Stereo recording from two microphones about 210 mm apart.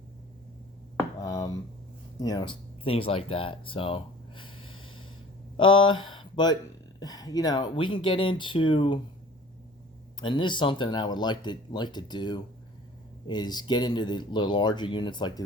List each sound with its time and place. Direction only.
1.2 s speech: 15° left (ahead or behind)
4.6 s snort: 75° left (ahead or behind)
5.5 s speech: 25° left (ahead or behind)
10.2 s speech: 20° left (ahead or behind)